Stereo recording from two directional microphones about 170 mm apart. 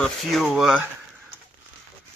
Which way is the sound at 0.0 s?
Centre (ahead or behind).